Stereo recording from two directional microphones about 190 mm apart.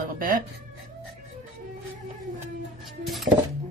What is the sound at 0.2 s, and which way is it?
Speech, 45° right (ahead or behind).